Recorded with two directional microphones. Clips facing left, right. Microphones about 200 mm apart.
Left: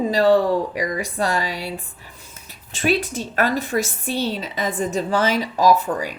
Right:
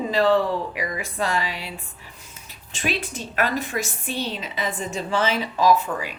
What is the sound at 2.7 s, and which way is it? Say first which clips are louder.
A woman's voice: left 7 dB; 40° left (ahead or behind).